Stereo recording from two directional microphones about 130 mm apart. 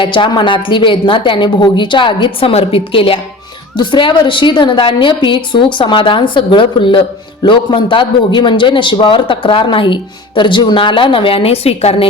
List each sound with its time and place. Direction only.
0.0 s a man's voice: 40° left (ahead or behind)